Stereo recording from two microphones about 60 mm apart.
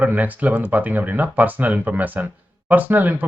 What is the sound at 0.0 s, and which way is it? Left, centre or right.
Speech, right.